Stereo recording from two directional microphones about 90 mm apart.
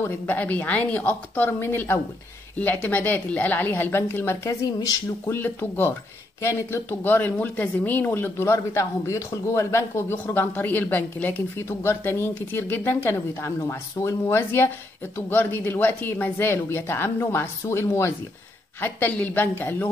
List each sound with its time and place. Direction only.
0.0 s speech: 20° left (ahead or behind)
4.7 s speech: 45° left (ahead or behind)
5.3 s speech: 25° left (ahead or behind)